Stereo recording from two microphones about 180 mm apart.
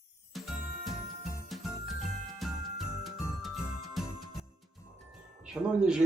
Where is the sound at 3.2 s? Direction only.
20° left (ahead or behind).